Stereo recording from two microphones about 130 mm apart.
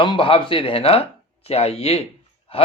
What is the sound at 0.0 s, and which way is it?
Speech, 40° left (ahead or behind).